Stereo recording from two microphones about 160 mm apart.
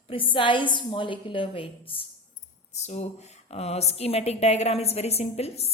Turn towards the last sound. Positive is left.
turn(degrees=40)  # may be behind; listen again after turning